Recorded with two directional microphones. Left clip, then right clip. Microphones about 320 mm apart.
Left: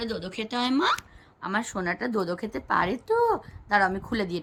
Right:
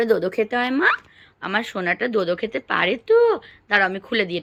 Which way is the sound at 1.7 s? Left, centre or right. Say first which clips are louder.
Right 7 dB; centre.